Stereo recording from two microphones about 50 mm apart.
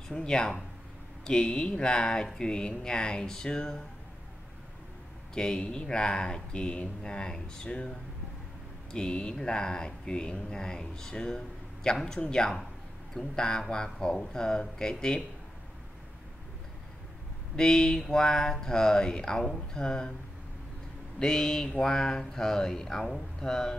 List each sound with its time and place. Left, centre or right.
0.1 s speech: centre
5.3 s speech: centre
8.9 s speech: centre
17.6 s speech: centre
21.2 s speech: centre